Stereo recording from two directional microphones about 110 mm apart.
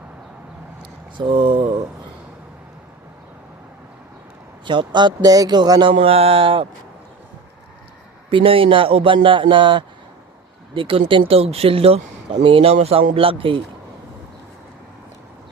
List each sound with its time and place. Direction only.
0.8 s a sound: 45° right (ahead or behind)
4.6 s speech: 45° right (ahead or behind)
6.0 s speech: 60° right (ahead or behind)
8.3 s speech: 50° right (ahead or behind)
12.7 s speech: 70° right (ahead or behind)